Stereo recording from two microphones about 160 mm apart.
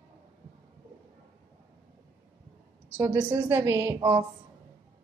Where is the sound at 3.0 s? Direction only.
15° right (ahead or behind).